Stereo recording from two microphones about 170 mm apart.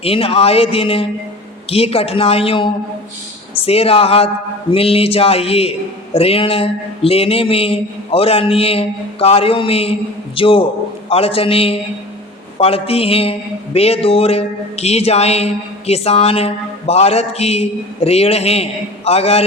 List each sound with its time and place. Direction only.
0.0 s a man's voice: 35° left (ahead or behind)